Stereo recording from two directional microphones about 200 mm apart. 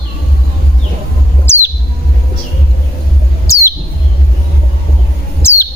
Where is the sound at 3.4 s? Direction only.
15° left (ahead or behind).